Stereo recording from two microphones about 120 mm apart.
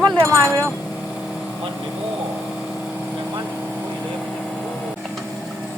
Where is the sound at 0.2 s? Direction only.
25° right (ahead or behind).